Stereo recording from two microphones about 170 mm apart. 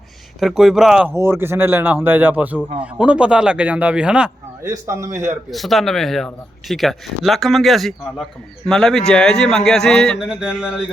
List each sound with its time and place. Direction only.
0.3 s speech: centre (ahead or behind)
1.1 s speech: 15° right (ahead or behind)
4.6 s speech: 15° right (ahead or behind)
5.5 s speech: centre (ahead or behind)